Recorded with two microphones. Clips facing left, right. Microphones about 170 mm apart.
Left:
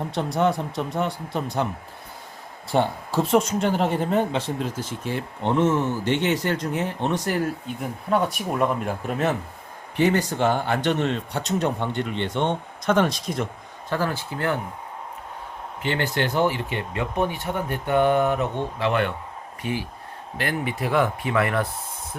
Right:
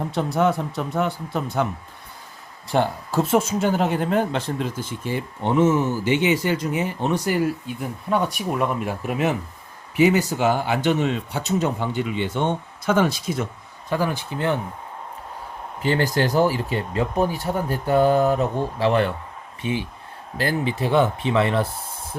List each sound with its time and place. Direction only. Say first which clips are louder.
0.1 s speech: right 1 dB; centre (ahead or behind)
2.6 s speech: right 1 dB; centre (ahead or behind)
13.9 s speech: right 2 dB; 15° right (ahead or behind)
15.8 s speech: right 4 dB; 40° right (ahead or behind)
19.6 s speech: right 3 dB; 25° right (ahead or behind)